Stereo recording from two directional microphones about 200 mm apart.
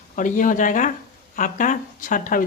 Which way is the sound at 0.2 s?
40° left (ahead or behind).